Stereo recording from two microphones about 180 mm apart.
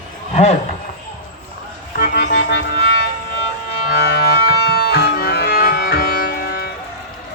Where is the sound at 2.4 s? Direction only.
70° left (ahead or behind).